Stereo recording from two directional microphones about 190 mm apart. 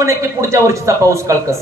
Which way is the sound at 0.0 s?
15° right (ahead or behind).